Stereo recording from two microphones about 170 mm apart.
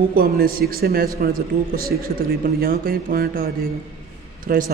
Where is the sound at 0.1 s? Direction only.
60° right (ahead or behind).